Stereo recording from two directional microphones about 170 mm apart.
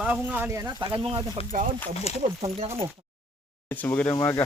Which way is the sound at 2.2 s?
35° right (ahead or behind).